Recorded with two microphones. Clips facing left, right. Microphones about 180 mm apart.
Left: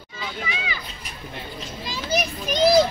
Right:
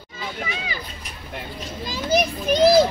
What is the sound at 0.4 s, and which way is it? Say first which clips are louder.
Speech: even; 45° right (ahead or behind).